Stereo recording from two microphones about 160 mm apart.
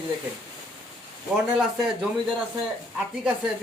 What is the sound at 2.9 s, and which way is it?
Speech, 5° right (ahead or behind).